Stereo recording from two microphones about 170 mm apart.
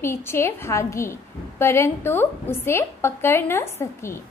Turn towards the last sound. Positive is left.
turn(degrees=15)  # may be behind; listen again after turning